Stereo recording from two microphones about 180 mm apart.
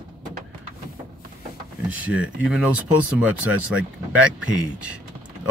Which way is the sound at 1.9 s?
5° right (ahead or behind).